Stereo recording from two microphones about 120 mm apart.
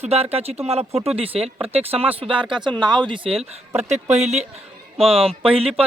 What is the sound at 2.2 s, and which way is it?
Speech, 45° right (ahead or behind).